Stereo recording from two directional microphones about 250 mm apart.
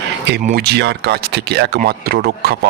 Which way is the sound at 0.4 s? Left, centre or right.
Right.